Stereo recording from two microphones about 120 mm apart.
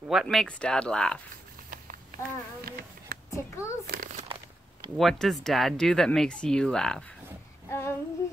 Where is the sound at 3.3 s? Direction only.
25° left (ahead or behind).